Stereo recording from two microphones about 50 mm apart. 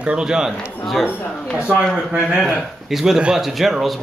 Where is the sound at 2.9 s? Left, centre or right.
Centre.